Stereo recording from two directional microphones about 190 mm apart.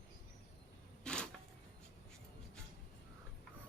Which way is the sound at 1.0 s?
5° left (ahead or behind).